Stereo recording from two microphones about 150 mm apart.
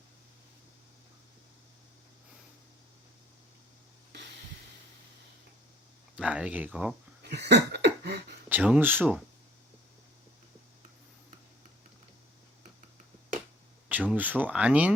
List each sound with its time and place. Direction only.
6.1 s speech: 10° right (ahead or behind)
7.3 s a sound: 90° right
8.4 s speech: 10° right (ahead or behind)
13.8 s speech: 10° right (ahead or behind)